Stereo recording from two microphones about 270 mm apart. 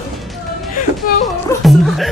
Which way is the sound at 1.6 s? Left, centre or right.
Centre.